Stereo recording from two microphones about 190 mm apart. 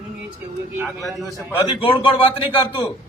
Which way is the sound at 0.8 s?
Centre (ahead or behind).